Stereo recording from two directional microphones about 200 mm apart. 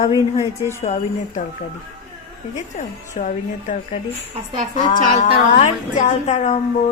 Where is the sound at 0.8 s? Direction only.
35° left (ahead or behind).